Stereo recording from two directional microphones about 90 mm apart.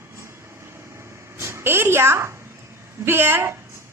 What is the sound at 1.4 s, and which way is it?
A woman's voice, 30° right (ahead or behind).